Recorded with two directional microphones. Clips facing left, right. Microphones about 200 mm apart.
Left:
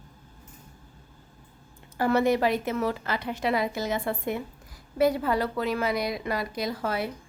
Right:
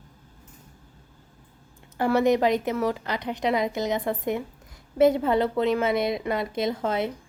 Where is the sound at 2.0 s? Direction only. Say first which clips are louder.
Right 2 dB; 15° right (ahead or behind).